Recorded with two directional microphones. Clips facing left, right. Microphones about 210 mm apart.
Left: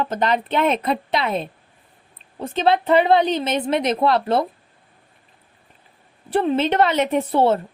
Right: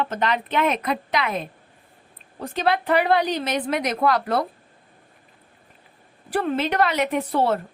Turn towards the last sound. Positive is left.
turn(degrees=25)  # may be behind; listen again after turning